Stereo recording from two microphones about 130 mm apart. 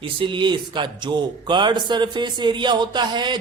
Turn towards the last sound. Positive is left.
turn(degrees=-35)  # may be behind; listen again after turning